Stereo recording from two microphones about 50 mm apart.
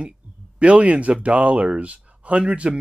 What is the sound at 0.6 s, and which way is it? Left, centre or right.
Speech, right.